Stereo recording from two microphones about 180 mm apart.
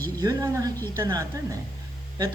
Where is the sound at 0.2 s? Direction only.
20° right (ahead or behind).